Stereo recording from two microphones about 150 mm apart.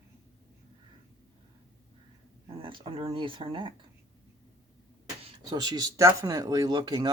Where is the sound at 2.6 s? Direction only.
35° right (ahead or behind).